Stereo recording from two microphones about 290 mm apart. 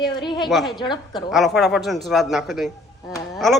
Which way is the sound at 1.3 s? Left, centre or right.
Centre.